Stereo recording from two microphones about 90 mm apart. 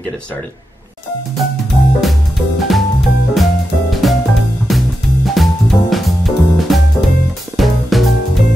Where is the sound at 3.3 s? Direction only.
Centre (ahead or behind).